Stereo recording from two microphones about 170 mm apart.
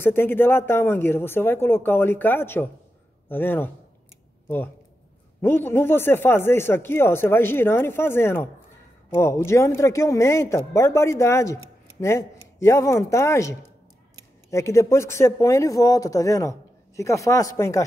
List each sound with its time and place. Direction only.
0.0 s speech: 15° left (ahead or behind)
5.4 s speech: 15° left (ahead or behind)